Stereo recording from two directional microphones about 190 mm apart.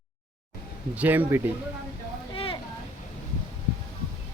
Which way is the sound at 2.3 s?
30° left (ahead or behind).